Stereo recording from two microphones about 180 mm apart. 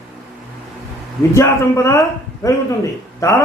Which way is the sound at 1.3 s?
15° left (ahead or behind).